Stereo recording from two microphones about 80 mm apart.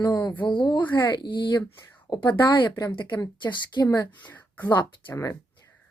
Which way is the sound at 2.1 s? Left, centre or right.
Left.